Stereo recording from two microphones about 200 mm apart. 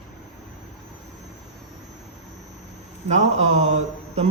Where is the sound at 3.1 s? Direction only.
35° right (ahead or behind).